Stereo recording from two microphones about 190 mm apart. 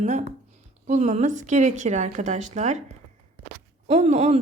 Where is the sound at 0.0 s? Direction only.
40° right (ahead or behind).